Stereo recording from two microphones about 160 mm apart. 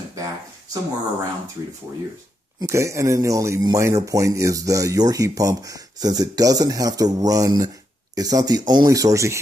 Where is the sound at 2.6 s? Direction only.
20° right (ahead or behind).